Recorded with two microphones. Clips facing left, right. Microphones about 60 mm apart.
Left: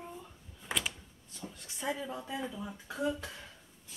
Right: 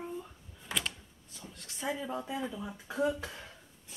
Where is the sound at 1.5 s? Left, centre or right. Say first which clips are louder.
Right 1 dB; centre.